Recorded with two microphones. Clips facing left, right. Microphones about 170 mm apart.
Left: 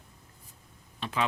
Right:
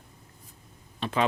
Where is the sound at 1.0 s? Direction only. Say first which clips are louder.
Right 4 dB; 45° right (ahead or behind).